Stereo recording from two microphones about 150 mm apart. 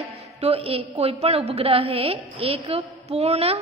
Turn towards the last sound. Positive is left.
turn(degrees=-45)  # may be behind; listen again after turning